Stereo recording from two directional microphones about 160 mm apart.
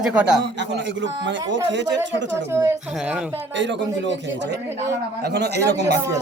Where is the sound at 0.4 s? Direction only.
90° right.